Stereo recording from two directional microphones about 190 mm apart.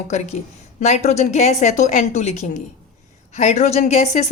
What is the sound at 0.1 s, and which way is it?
A woman's voice, 35° left (ahead or behind).